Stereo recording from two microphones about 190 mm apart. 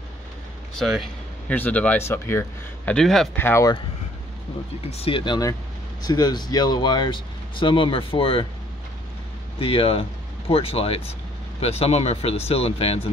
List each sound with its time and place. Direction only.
0.7 s speech: centre (ahead or behind)
4.9 s speech: 30° left (ahead or behind)
9.6 s speech: 30° left (ahead or behind)